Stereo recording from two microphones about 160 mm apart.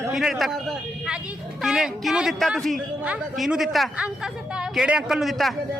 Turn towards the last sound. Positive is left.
turn(degrees=0)  # may be behind; listen again after turning